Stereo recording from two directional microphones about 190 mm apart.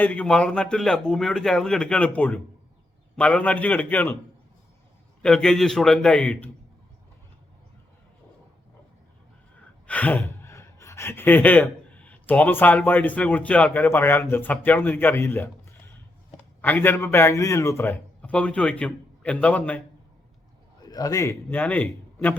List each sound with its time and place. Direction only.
0.0 s a man's voice: 5° left (ahead or behind)
5.2 s a man's voice: 5° left (ahead or behind)
9.8 s gasp: 5° left (ahead or behind)
16.6 s a man's voice: 10° left (ahead or behind)
20.8 s a man's voice: 20° left (ahead or behind)